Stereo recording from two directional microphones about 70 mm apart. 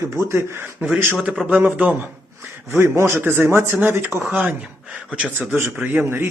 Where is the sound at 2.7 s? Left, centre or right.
Right.